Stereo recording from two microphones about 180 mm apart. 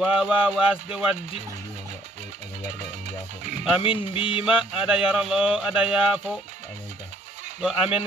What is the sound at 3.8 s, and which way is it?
Music, 30° left (ahead or behind).